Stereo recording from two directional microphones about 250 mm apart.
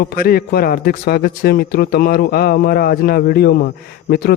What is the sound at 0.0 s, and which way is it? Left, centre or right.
A man's voice, left.